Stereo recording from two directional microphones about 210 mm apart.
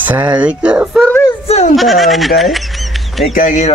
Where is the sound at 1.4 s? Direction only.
30° left (ahead or behind).